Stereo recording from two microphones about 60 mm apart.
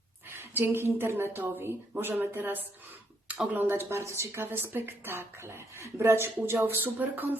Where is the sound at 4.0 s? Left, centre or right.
Right.